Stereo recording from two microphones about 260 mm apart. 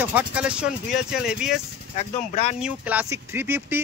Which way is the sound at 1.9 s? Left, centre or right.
Left.